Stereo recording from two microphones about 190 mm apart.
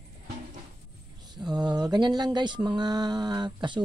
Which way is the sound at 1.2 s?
20° right (ahead or behind).